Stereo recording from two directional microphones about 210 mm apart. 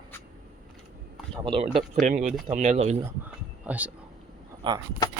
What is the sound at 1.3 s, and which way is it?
Speech, 25° right (ahead or behind).